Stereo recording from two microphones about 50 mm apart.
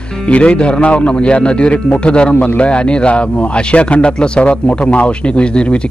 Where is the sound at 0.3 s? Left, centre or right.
Left.